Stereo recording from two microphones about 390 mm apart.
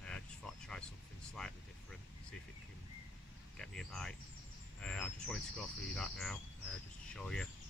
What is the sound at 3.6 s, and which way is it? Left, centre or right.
Speech, centre.